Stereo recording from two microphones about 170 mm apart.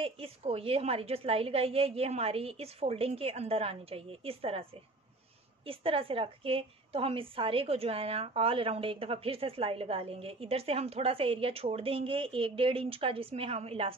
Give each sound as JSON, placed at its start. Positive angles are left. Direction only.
{"t": 0.0, "sound": "a woman's voice", "side_deg": -35}
{"t": 5.7, "sound": "a woman's voice", "side_deg": -30}